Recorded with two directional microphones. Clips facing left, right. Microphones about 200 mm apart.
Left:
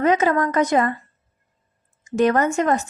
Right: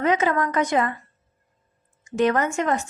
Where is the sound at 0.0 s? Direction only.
40° left (ahead or behind).